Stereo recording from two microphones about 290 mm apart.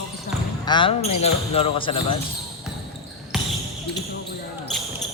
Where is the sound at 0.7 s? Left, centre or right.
Centre.